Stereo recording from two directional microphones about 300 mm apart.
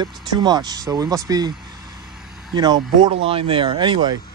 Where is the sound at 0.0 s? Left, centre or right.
Centre.